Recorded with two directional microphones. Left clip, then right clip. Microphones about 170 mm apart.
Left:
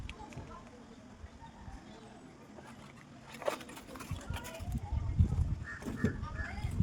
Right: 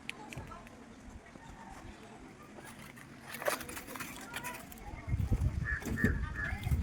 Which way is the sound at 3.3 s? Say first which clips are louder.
Right 2 dB; centre (ahead or behind).